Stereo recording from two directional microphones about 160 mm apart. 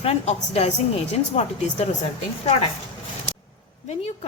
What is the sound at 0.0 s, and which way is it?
A woman's voice, 40° left (ahead or behind).